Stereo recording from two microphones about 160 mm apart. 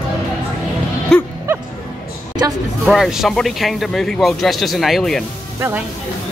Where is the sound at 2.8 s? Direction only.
Centre (ahead or behind).